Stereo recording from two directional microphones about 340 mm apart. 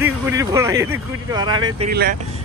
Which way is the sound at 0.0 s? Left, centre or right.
Centre.